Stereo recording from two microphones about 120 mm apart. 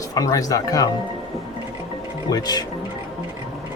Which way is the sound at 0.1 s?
30° left (ahead or behind).